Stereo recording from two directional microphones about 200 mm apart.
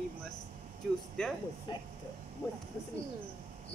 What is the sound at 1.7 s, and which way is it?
Speech, 20° left (ahead or behind).